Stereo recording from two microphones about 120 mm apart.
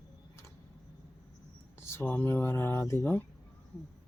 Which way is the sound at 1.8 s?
20° left (ahead or behind).